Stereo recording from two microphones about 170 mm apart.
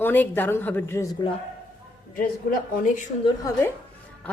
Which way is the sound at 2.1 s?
55° left (ahead or behind).